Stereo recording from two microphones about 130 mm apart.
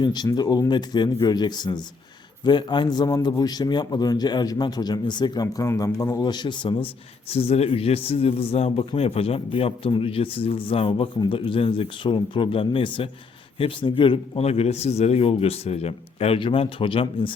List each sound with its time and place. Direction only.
0.0 s a man's voice: 35° left (ahead or behind)
14.4 s a man's voice: 55° left (ahead or behind)